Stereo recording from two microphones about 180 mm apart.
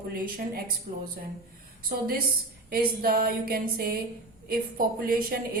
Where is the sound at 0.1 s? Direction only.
55° right (ahead or behind).